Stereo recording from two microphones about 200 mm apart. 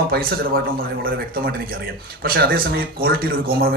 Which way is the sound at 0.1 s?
50° right (ahead or behind).